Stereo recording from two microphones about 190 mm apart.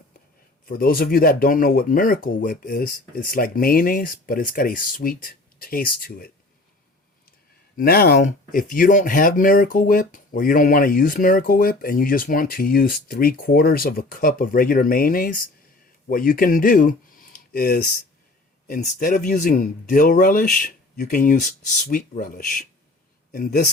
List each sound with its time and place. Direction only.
0.7 s speech: 50° left (ahead or behind)
7.8 s speech: 50° left (ahead or behind)